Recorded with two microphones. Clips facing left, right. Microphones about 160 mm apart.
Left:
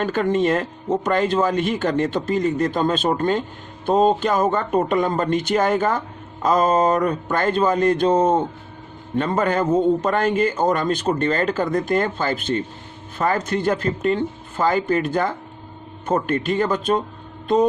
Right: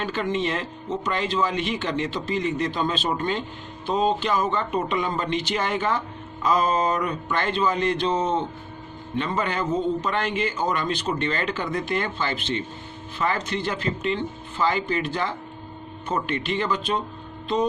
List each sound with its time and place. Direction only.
0.0 s a man's voice: 50° left (ahead or behind)